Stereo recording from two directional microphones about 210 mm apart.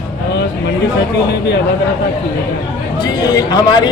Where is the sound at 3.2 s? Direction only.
20° left (ahead or behind).